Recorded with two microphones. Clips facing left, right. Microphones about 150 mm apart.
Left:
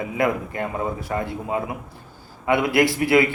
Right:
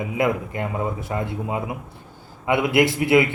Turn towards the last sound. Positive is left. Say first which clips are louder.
# even
turn(degrees=-20)  # may be behind; listen again after turning